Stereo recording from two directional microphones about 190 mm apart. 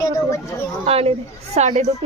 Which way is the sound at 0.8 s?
30° right (ahead or behind).